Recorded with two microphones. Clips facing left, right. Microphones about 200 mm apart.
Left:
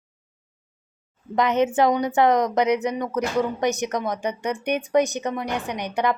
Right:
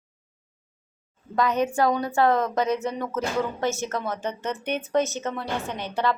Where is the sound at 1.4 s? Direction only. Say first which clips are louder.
Left 3 dB; 20° left (ahead or behind).